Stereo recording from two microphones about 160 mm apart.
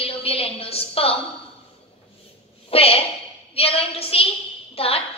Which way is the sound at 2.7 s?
35° left (ahead or behind).